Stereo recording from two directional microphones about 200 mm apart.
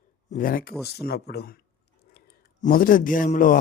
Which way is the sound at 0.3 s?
45° left (ahead or behind).